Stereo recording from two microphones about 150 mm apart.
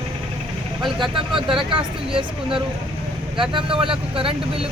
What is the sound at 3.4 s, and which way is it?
Speech, 35° right (ahead or behind).